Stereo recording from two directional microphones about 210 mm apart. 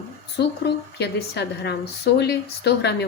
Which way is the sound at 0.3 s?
55° left (ahead or behind).